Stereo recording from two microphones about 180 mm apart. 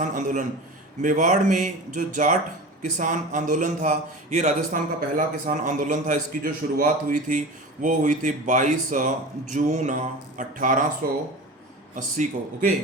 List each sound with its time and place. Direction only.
0.0 s a man's voice: 45° right (ahead or behind)
11.9 s a man's voice: 45° right (ahead or behind)